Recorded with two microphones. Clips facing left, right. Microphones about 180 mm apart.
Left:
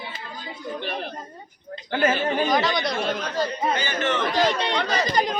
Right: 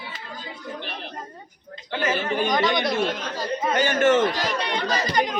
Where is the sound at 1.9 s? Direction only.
50° left (ahead or behind).